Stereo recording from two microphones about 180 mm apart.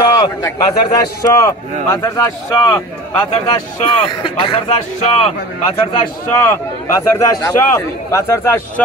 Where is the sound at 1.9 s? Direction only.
20° left (ahead or behind).